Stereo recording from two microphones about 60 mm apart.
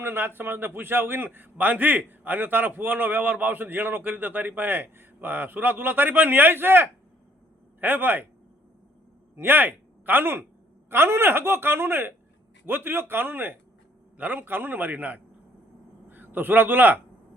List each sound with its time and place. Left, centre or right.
0.0 s a man's voice: right
9.3 s a man's voice: right